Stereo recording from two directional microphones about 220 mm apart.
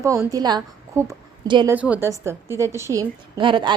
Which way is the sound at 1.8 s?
5° right (ahead or behind).